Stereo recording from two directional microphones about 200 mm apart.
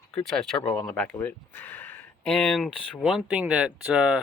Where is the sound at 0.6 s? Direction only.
25° left (ahead or behind).